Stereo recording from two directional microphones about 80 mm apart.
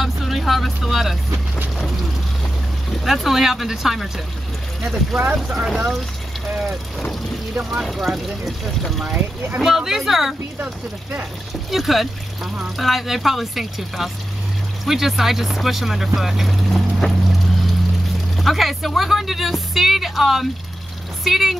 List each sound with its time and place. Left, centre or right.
0.0 s speech: centre
2.9 s speech: centre
7.8 s speech: centre
10.6 s speech: right
11.7 s speech: centre